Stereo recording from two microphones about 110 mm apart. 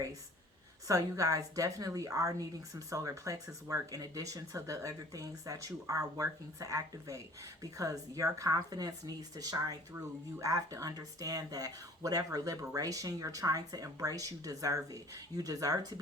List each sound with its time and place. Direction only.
0.9 s a woman's voice: 30° right (ahead or behind)
9.9 s a woman's voice: 25° right (ahead or behind)